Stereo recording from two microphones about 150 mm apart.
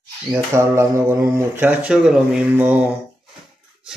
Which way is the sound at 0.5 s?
15° right (ahead or behind).